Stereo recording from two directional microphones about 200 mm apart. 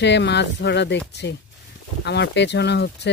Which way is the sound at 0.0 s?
60° left (ahead or behind).